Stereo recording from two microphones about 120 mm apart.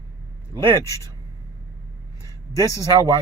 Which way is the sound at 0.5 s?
20° right (ahead or behind).